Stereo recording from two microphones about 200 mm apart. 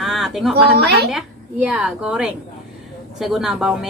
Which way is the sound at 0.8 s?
55° right (ahead or behind).